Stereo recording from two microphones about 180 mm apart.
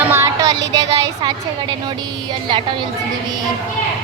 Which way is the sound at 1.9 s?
25° right (ahead or behind).